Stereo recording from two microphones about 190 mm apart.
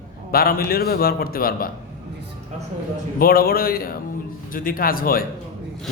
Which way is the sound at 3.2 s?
55° left (ahead or behind).